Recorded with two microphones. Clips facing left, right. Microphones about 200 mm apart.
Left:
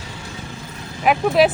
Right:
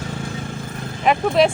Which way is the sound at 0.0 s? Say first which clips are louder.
Right 7 dB; 50° right (ahead or behind).